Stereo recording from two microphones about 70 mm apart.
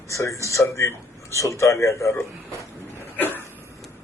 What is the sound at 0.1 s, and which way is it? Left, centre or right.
A man's voice, left.